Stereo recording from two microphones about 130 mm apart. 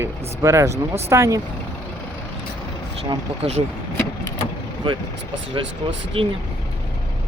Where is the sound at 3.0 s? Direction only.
50° right (ahead or behind).